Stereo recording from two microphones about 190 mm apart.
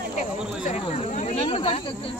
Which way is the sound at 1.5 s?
30° left (ahead or behind).